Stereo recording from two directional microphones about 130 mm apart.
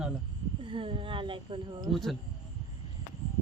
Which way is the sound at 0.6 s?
40° right (ahead or behind).